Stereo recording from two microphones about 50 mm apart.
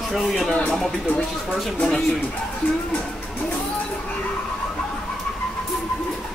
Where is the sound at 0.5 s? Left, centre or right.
Centre.